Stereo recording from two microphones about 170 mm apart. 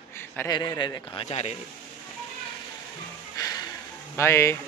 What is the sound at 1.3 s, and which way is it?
Speech, 40° left (ahead or behind).